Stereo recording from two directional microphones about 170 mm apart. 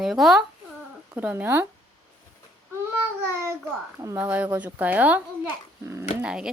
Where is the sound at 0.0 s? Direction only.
Centre (ahead or behind).